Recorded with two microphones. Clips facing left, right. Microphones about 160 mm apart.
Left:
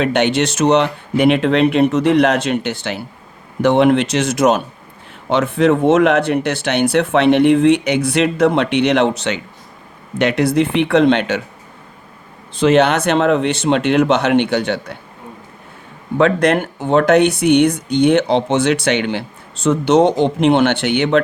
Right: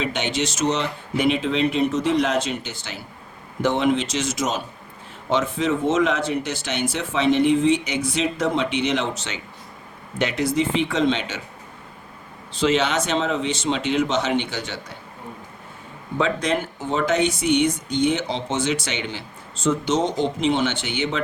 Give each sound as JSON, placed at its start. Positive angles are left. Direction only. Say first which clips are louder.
{"t": 0.0, "sound": "speech", "louder": "left 9 dB", "side_deg": 65}
{"t": 12.5, "sound": "speech", "louder": "left 8 dB", "side_deg": 55}
{"t": 16.1, "sound": "speech", "louder": "left 8 dB", "side_deg": 65}